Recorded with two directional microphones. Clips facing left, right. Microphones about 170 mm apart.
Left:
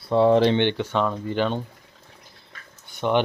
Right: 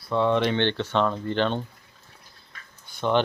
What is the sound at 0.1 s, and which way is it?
Speech, 30° left (ahead or behind).